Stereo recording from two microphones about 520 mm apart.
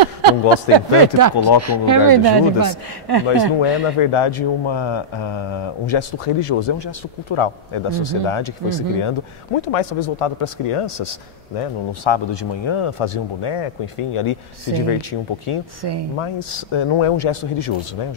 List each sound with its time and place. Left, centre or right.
0.7 s speech: right
3.3 s speech: left
9.6 s speech: left
11.6 s speech: left
15.8 s speech: right
16.2 s speech: left